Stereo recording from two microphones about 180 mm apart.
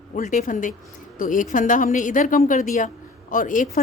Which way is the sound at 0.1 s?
45° left (ahead or behind).